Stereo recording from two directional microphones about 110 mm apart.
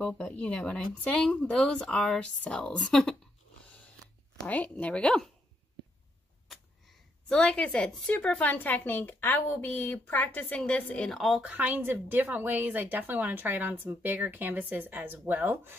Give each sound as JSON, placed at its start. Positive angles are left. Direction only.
{"t": 0.0, "sound": "speech", "side_deg": 10}
{"t": 3.6, "sound": "biting", "side_deg": 10}
{"t": 4.4, "sound": "speech", "side_deg": 15}
{"t": 6.5, "sound": "speech", "side_deg": 5}
{"t": 11.1, "sound": "speech", "side_deg": 0}
{"t": 11.4, "sound": "a woman's voice", "side_deg": -15}